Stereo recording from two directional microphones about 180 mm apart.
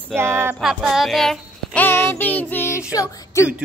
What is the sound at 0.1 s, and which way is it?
Music, 15° right (ahead or behind).